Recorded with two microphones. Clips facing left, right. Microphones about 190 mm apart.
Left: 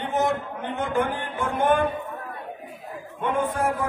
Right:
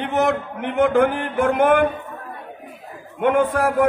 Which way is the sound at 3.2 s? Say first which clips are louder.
Right 7 dB; 80° right.